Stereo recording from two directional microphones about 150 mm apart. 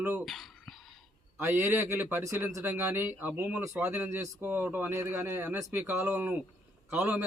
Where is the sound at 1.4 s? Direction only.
15° right (ahead or behind).